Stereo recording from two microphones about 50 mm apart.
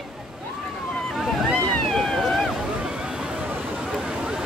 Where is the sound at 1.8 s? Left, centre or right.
Centre.